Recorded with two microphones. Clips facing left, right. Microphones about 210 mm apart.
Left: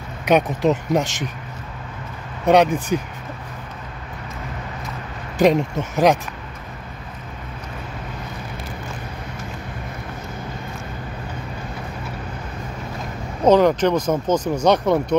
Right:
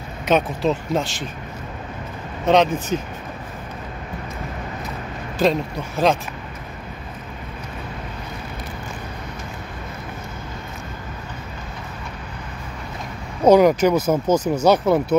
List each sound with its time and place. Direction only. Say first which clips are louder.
0.2 s speech: left 2 dB; 15° left (ahead or behind)
2.4 s speech: left 2 dB; 10° left (ahead or behind)
5.4 s speech: left 3 dB; 15° left (ahead or behind)
13.5 s speech: right 1 dB; 10° right (ahead or behind)